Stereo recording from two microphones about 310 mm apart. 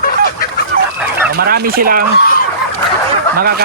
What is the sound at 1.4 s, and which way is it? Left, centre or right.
Speech, right.